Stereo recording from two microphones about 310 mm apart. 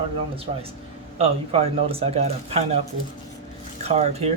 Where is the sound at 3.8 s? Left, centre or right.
Right.